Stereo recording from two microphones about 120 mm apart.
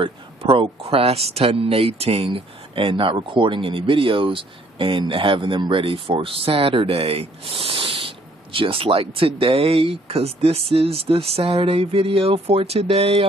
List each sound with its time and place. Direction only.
0.0 s speech: 50° right (ahead or behind)